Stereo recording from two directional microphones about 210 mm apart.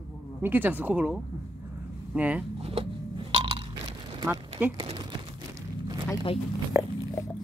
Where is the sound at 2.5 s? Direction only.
25° right (ahead or behind).